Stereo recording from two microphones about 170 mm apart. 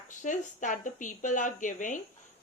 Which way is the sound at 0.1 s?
50° left (ahead or behind).